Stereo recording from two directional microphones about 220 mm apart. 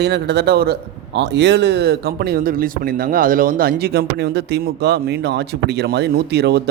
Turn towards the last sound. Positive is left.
turn(degrees=-50)  # may be behind; listen again after turning